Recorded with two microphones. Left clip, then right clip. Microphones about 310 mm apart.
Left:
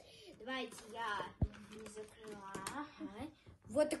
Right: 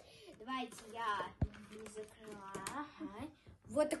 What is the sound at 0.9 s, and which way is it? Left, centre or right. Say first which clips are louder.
Speech: right 3 dB; centre.